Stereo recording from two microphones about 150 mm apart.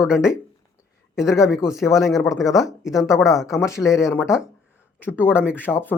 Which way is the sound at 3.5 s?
20° left (ahead or behind).